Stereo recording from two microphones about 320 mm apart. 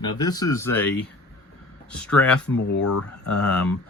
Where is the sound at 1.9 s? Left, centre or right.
Centre.